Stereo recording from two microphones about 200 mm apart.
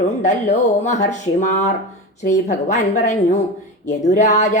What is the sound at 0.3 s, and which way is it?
Speech, 35° left (ahead or behind).